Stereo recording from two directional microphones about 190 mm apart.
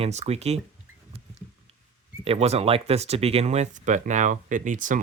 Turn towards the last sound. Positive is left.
turn(degrees=-45)  # may be behind; listen again after turning